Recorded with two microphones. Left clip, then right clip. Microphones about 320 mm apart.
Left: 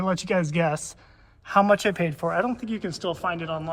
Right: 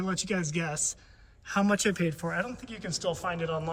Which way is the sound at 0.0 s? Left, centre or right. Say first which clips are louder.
Left 7 dB; centre.